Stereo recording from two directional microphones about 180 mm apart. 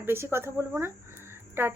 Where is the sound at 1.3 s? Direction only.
10° right (ahead or behind).